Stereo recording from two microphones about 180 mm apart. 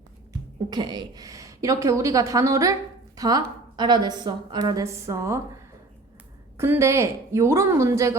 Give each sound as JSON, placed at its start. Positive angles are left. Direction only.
{"t": 0.7, "sound": "a woman's voice", "side_deg": -25}
{"t": 6.6, "sound": "a woman's voice", "side_deg": -15}